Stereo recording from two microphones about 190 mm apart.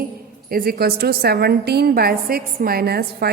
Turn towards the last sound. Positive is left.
turn(degrees=-55)  # may be behind; listen again after turning